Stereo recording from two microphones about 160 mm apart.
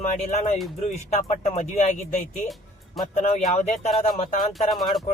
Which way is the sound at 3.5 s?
45° left (ahead or behind).